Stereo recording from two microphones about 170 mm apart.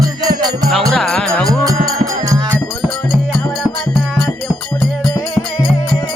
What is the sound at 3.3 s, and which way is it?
Music, centre (ahead or behind).